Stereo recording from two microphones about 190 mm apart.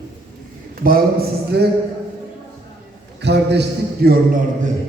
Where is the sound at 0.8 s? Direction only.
50° right (ahead or behind).